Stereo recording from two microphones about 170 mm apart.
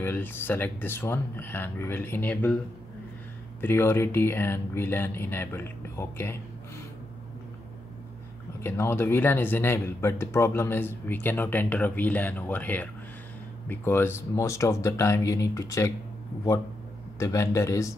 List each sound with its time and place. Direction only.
0.0 s speech: 15° left (ahead or behind)
3.6 s speech: 15° left (ahead or behind)
8.6 s speech: 15° left (ahead or behind)
17.2 s speech: 20° left (ahead or behind)